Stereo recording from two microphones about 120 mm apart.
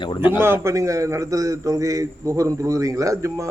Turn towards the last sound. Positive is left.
turn(degrees=-25)  # may be behind; listen again after turning